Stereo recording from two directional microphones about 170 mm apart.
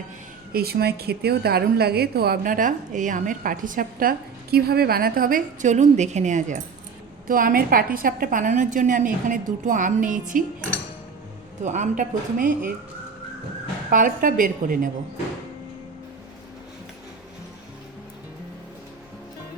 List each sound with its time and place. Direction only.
0.5 s a woman's voice: 65° right (ahead or behind)
4.5 s a woman's voice: 65° right (ahead or behind); by 6.6 s 45° right (ahead or behind)
7.3 s a woman's voice: 55° right (ahead or behind)
11.6 s a woman's voice: 45° right (ahead or behind)
13.9 s a woman's voice: 50° right (ahead or behind)